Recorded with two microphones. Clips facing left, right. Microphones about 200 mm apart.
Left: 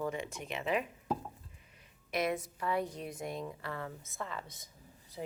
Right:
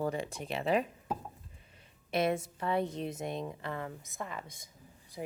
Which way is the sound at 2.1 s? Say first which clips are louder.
Right 3 dB; 30° right (ahead or behind).